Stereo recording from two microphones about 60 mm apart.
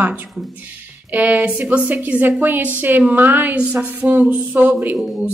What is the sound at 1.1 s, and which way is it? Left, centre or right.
A woman's voice, right.